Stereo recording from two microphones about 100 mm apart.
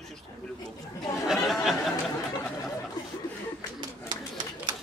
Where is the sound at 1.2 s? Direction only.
Centre (ahead or behind).